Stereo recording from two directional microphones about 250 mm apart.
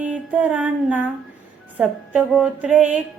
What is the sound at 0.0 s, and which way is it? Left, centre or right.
Music, centre.